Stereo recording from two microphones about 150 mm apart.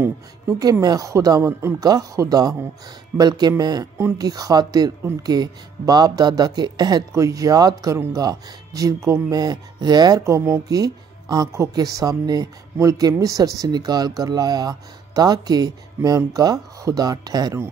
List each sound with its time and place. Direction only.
0.0 s speech: 20° right (ahead or behind)